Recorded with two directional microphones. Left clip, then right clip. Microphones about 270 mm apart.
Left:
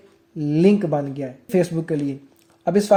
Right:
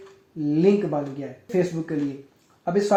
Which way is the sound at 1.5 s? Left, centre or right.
Left.